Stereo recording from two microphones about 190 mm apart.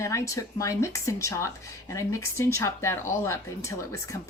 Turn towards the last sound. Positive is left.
turn(degrees=15)  # may be behind; listen again after turning